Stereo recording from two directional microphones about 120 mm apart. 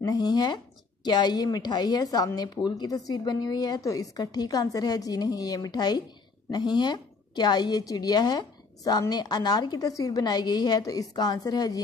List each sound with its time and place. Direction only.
0.0 s a woman's voice: 35° left (ahead or behind)